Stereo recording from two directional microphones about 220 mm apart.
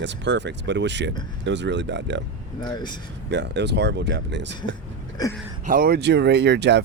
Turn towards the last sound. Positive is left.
turn(degrees=-50)  # may be behind; listen again after turning